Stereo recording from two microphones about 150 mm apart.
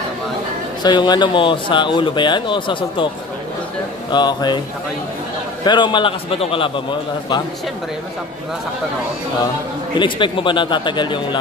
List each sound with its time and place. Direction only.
0.8 s speech: 30° left (ahead or behind)
4.1 s speech: 30° left (ahead or behind)
5.7 s speech: 30° left (ahead or behind)
9.9 s speech: 35° left (ahead or behind)